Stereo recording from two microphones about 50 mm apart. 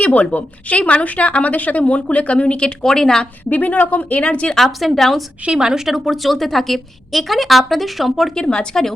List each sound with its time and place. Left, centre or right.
0.0 s speech: left; by 3.2 s centre
3.5 s speech: left
4.5 s a woman's voice: centre
5.5 s a woman's voice: centre
8.4 s a woman's voice: centre